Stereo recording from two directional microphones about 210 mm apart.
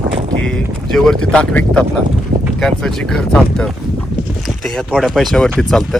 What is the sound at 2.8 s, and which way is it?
Speech, centre (ahead or behind).